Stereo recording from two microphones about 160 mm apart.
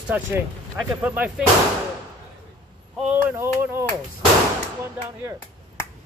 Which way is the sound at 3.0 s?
15° right (ahead or behind).